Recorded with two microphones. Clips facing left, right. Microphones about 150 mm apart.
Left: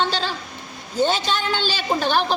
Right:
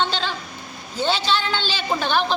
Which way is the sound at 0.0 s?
40° left (ahead or behind).